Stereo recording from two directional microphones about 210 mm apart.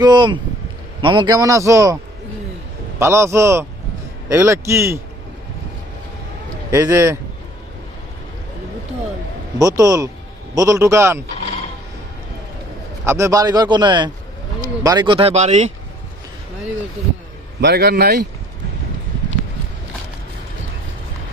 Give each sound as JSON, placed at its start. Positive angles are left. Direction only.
{"t": 0.0, "sound": "a man's voice", "side_deg": -20}
{"t": 3.0, "sound": "a man's voice", "side_deg": -15}
{"t": 6.7, "sound": "a man's voice", "side_deg": -15}
{"t": 9.6, "sound": "a man's voice", "side_deg": -15}
{"t": 13.1, "sound": "a man's voice", "side_deg": -15}
{"t": 17.6, "sound": "a man's voice", "side_deg": -50}